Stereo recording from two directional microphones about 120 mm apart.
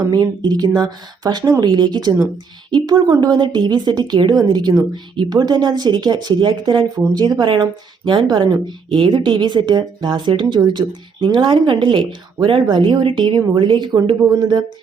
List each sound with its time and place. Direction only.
0.0 s speech: 35° right (ahead or behind)